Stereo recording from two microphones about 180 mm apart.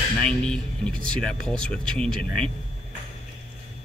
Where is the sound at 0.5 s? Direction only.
5° left (ahead or behind).